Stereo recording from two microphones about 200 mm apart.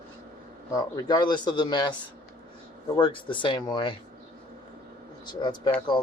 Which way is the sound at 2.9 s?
25° left (ahead or behind).